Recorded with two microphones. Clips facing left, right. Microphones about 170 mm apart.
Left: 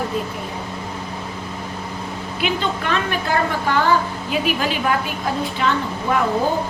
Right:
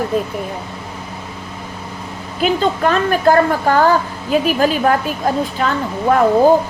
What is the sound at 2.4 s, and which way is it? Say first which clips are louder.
A woman's voice: right 8 dB; 40° right (ahead or behind).